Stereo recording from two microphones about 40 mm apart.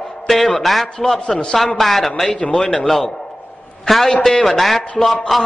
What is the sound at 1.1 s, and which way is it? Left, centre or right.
Speech, centre.